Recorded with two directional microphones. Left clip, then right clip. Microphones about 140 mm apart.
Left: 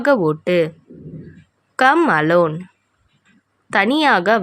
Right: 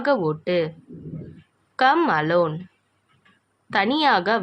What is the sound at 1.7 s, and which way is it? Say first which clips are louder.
Speech: left 5 dB; 55° left (ahead or behind).